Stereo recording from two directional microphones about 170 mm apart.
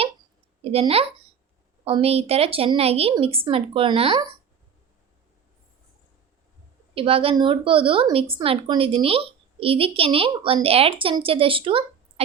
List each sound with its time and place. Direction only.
0.6 s a woman's voice: 35° right (ahead or behind)
6.9 s a woman's voice: 35° right (ahead or behind)